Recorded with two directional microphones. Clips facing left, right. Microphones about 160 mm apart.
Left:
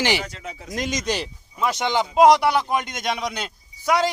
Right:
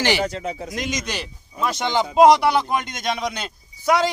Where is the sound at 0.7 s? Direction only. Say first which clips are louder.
Left 2 dB; 40° left (ahead or behind).